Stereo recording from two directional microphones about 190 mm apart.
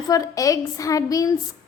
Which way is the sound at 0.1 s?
15° left (ahead or behind).